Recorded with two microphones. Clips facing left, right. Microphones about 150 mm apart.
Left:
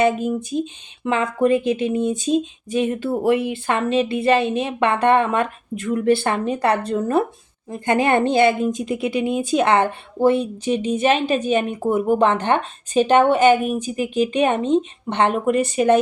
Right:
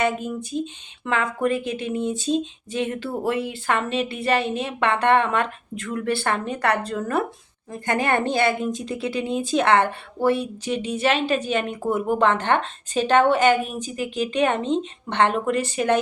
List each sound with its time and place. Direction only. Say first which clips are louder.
0.0 s a woman's voice: left 5 dB; 15° left (ahead or behind)